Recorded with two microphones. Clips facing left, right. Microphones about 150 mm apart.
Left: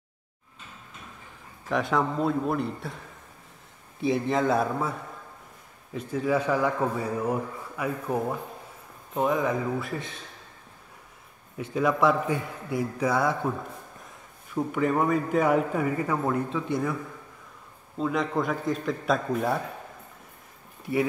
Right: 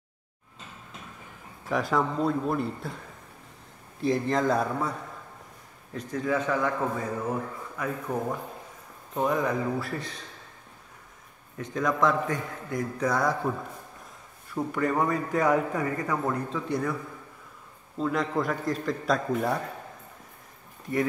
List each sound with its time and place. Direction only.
1.7 s a man's voice: centre (ahead or behind)
4.0 s a man's voice: 5° left (ahead or behind)
5.9 s a man's voice: 10° left (ahead or behind)
11.7 s a man's voice: 10° left (ahead or behind)
14.5 s a man's voice: 5° left (ahead or behind)
17.9 s a man's voice: centre (ahead or behind)